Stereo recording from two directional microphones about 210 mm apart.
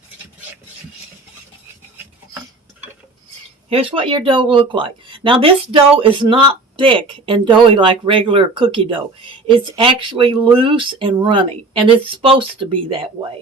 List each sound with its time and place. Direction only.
3.7 s speech: 25° right (ahead or behind)